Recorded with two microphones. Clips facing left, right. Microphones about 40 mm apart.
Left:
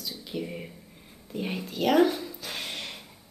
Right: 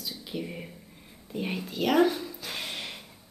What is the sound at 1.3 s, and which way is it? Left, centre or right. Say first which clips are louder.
Speech: even; centre.